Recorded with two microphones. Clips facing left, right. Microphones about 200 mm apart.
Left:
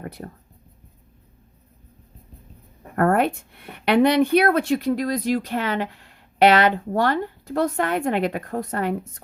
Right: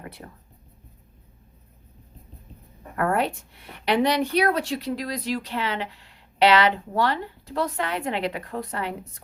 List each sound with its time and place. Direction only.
2.9 s a woman's voice: 50° left (ahead or behind)